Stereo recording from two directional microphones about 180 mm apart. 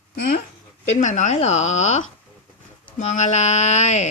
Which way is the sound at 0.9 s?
40° left (ahead or behind).